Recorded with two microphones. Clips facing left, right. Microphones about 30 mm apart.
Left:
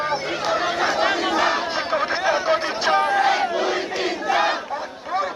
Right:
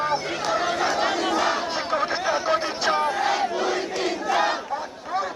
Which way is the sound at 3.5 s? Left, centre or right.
Centre.